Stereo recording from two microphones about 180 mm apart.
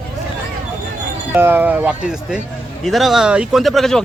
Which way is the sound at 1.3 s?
10° right (ahead or behind).